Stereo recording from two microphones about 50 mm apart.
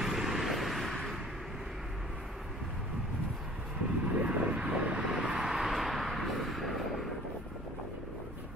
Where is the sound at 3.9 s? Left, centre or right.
Right.